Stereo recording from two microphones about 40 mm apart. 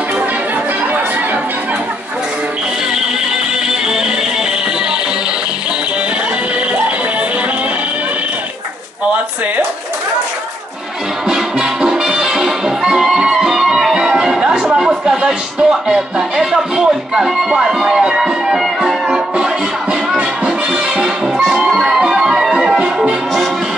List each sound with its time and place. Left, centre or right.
11.2 s music: centre
19.0 s music: centre
21.6 s music: centre
22.5 s music: right